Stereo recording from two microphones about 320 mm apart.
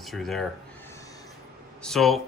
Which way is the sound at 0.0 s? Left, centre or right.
Centre.